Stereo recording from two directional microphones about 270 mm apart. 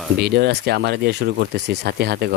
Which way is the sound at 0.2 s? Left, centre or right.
Right.